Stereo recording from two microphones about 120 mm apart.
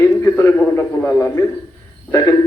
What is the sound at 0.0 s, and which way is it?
A man's voice, 20° left (ahead or behind).